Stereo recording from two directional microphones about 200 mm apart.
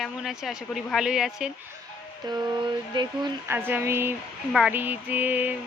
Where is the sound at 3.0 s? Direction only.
20° right (ahead or behind).